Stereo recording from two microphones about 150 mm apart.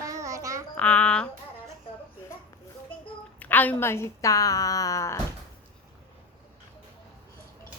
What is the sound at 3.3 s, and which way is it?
A woman's voice, 10° left (ahead or behind).